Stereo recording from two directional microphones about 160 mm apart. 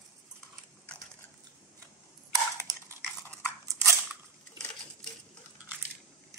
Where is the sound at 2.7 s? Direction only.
25° right (ahead or behind).